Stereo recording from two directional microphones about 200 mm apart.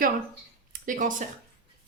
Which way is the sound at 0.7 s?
40° right (ahead or behind).